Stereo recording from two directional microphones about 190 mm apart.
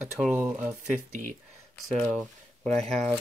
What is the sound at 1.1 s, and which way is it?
Speech, 40° right (ahead or behind).